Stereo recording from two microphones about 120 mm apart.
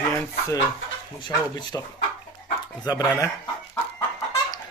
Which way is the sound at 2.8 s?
30° left (ahead or behind).